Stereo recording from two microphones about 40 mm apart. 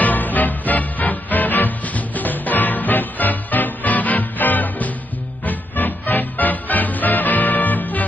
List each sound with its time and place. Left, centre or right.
0.0 s music: left